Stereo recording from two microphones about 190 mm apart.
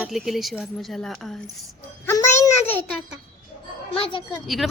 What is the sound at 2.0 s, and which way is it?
Music, 15° left (ahead or behind).